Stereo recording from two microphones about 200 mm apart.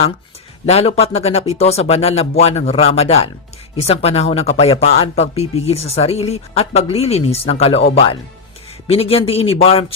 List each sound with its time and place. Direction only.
0.6 s a man's voice: 30° left (ahead or behind)